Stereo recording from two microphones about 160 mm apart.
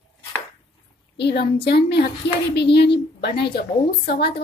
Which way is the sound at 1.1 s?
90° left.